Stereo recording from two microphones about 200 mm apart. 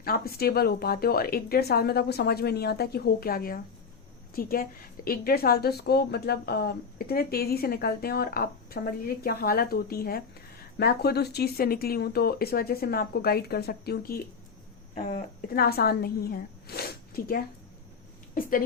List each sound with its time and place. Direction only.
0.0 s a woman's voice: 50° left (ahead or behind)